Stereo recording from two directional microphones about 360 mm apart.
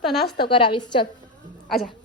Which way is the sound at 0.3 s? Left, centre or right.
Centre.